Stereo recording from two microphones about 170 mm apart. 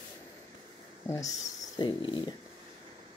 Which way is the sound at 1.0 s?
15° left (ahead or behind).